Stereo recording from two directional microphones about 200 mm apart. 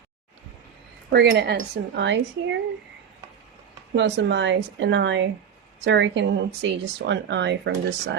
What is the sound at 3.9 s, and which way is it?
Speech, 60° right (ahead or behind).